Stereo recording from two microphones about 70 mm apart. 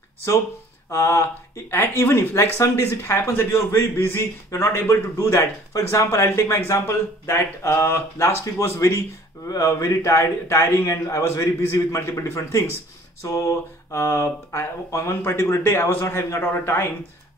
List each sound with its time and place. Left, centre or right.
0.8 s a man's voice: left